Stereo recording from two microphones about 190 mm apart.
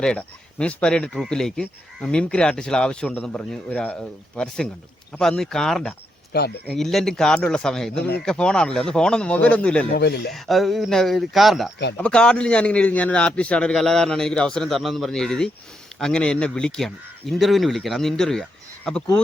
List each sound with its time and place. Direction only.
0.0 s speech: 5° left (ahead or behind)
6.3 s speech: 60° left (ahead or behind)
6.7 s speech: centre (ahead or behind)
9.9 s speech: 60° left (ahead or behind)
10.3 s speech: centre (ahead or behind)